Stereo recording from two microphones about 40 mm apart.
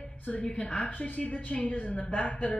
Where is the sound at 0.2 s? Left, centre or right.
Left.